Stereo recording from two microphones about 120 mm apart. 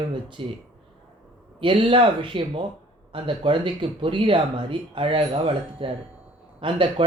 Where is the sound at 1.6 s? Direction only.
45° right (ahead or behind).